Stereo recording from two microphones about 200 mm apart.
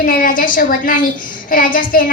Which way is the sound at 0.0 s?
45° left (ahead or behind).